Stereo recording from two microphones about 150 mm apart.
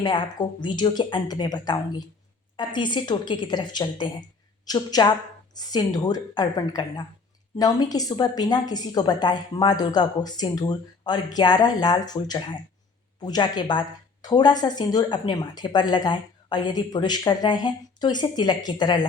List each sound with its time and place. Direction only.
0.0 s speech: 30° left (ahead or behind)